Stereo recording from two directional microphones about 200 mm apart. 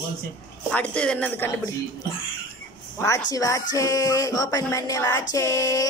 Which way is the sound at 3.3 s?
15° left (ahead or behind).